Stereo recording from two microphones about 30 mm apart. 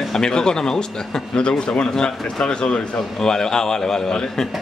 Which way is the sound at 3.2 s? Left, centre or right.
Left.